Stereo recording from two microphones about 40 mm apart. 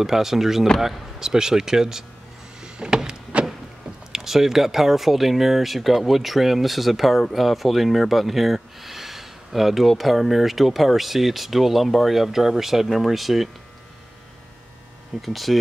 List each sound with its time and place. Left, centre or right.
0.0 s speech: centre
2.6 s a sound: centre
4.1 s speech: centre
15.2 s speech: centre